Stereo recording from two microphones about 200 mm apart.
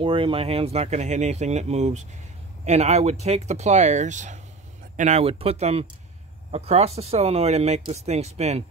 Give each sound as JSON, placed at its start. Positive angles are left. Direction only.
{"t": 0.0, "sound": "speech", "side_deg": -25}